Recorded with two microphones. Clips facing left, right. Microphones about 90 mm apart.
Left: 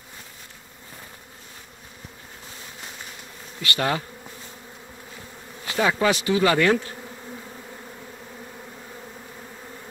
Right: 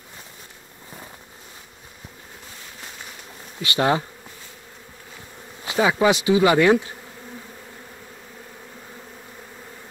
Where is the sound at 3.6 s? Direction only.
20° right (ahead or behind).